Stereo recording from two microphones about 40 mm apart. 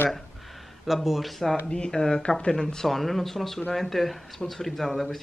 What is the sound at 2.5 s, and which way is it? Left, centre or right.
Speech, centre.